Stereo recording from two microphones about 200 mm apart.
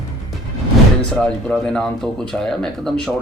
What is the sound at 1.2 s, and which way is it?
Speech, 5° left (ahead or behind).